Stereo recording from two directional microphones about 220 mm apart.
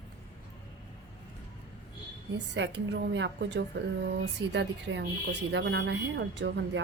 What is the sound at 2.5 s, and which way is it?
A woman's voice, 55° right (ahead or behind).